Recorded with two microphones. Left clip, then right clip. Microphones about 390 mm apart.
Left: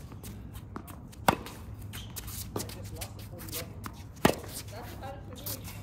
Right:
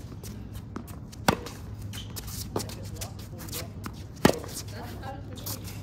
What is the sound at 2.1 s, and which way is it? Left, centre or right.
Shuffling cards, centre.